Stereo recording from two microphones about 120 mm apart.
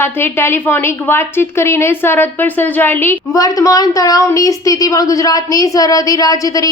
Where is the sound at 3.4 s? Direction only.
30° left (ahead or behind).